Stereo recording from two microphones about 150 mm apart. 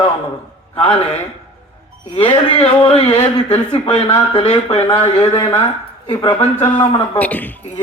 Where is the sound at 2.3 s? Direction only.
40° left (ahead or behind).